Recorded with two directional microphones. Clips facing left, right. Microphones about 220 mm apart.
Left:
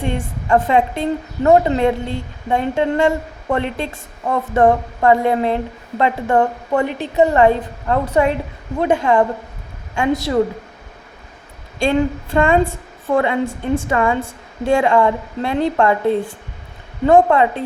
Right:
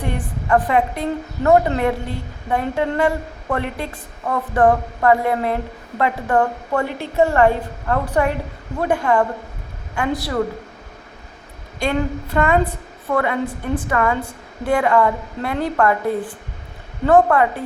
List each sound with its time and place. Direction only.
0.0 s a woman's voice: 25° left (ahead or behind)
11.8 s a woman's voice: 30° left (ahead or behind)